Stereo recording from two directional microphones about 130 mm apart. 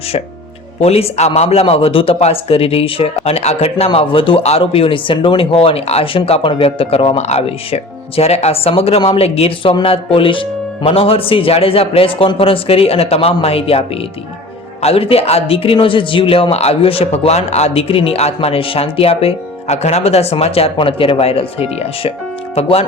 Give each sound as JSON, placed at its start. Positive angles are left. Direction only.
{"t": 0.8, "sound": "a man's voice", "side_deg": 55}